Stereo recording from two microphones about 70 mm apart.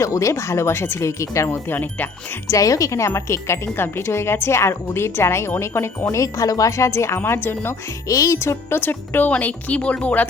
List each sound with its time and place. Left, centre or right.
0.0 s speech: left
1.6 s speech: left
2.5 s speech: left
8.0 s speech: left
8.4 s speech: left